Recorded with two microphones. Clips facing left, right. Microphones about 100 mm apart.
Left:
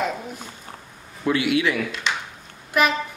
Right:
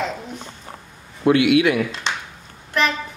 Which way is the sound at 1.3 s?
65° right (ahead or behind).